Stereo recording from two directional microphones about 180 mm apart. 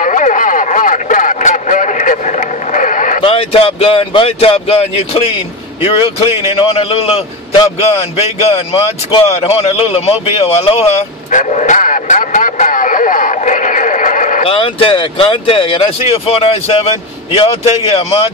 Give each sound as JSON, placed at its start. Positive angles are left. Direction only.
{"t": 0.0, "sound": "a sound", "side_deg": 45}
{"t": 3.2, "sound": "a man's voice", "side_deg": 30}
{"t": 14.4, "sound": "speech", "side_deg": 30}